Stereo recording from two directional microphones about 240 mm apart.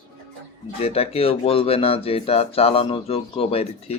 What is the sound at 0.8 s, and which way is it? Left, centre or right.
Speech, left.